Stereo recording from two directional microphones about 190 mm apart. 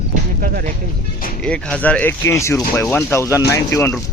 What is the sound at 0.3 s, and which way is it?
Speech, 50° right (ahead or behind).